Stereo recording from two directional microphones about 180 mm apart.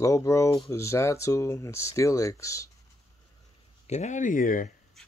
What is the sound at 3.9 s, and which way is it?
Speech, 40° left (ahead or behind).